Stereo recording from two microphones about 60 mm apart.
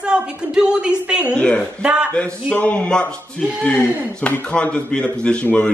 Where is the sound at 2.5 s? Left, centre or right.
Left.